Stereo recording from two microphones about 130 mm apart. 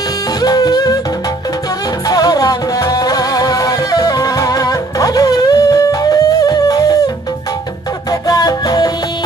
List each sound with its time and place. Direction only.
0.4 s music: 30° left (ahead or behind)
2.0 s music: 30° left (ahead or behind)
8.1 s music: 30° left (ahead or behind)